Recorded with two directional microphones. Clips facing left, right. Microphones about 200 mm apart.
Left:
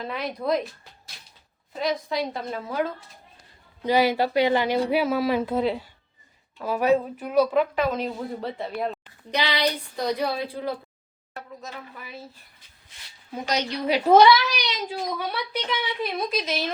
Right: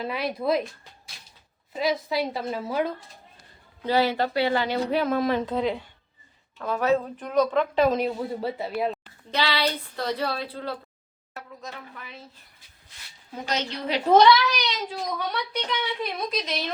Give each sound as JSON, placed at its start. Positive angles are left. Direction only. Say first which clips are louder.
{"t": 0.0, "sound": "a woman's voice", "louder": "right 2 dB", "side_deg": -5}
{"t": 1.7, "sound": "a woman's voice", "louder": "right 1 dB", "side_deg": -5}
{"t": 3.8, "sound": "speech", "louder": "left 2 dB", "side_deg": 15}
{"t": 7.9, "sound": "a woman's voice", "louder": "right 3 dB", "side_deg": -5}
{"t": 9.3, "sound": "a woman's voice", "louder": "left 1 dB", "side_deg": 15}
{"t": 13.3, "sound": "a woman's voice", "louder": "left 3 dB", "side_deg": 15}